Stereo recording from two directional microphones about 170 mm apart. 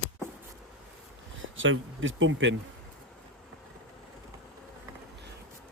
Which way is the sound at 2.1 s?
90° right.